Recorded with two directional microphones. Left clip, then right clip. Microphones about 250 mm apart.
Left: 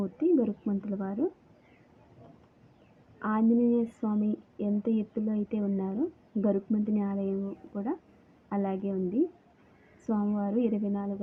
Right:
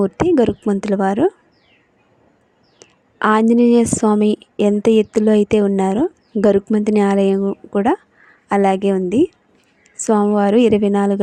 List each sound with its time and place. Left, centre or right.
0.0 s a woman's voice: right
3.2 s a woman's voice: right
10.0 s a woman's voice: right